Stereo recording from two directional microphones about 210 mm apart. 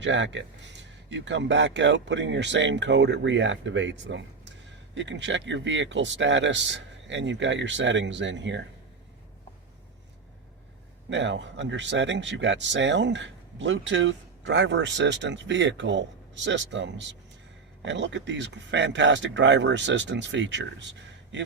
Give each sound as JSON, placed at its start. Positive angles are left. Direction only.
{"t": 0.0, "sound": "speech", "side_deg": -60}
{"t": 11.1, "sound": "speech", "side_deg": -60}